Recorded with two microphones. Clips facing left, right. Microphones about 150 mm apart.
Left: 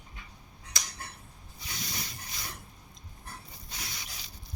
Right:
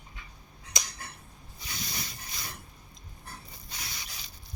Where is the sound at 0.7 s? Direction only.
20° right (ahead or behind).